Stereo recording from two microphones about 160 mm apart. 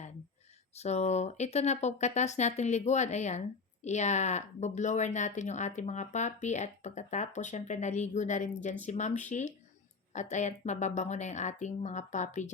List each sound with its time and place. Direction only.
0.8 s speech: 45° left (ahead or behind)